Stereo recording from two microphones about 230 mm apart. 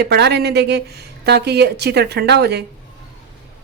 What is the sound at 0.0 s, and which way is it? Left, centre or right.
Speech, right.